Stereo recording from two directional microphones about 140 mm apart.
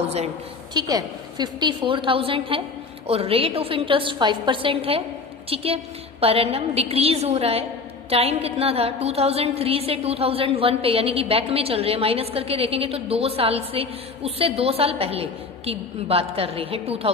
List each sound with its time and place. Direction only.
0.7 s a woman's voice: 30° right (ahead or behind); by 17.1 s 45° right (ahead or behind)